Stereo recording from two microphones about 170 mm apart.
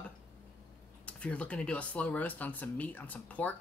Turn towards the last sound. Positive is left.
turn(degrees=10)  # may be behind; listen again after turning